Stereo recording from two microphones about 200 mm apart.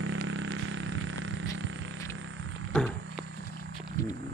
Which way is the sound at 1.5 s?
70° right (ahead or behind).